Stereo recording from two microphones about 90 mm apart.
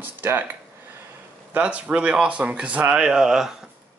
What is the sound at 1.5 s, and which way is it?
A man's voice, 15° right (ahead or behind).